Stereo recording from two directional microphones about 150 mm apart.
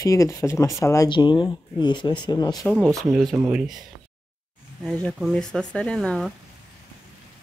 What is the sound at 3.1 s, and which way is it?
Speech, 5° right (ahead or behind).